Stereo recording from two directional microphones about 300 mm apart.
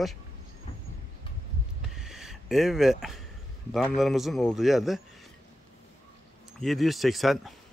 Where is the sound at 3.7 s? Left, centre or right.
Centre.